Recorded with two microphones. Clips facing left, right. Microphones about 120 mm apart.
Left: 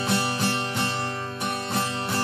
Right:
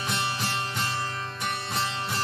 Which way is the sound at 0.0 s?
30° left (ahead or behind).